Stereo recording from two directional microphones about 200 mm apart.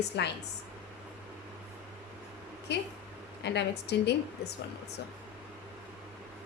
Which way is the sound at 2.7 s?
60° left (ahead or behind).